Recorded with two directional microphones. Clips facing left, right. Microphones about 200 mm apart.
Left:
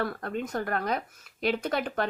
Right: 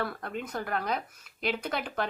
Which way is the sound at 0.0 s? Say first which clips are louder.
Left 3 dB; 40° left (ahead or behind).